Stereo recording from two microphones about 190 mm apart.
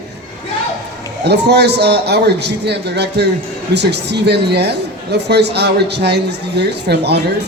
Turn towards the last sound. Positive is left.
turn(degrees=-60)  # may be behind; listen again after turning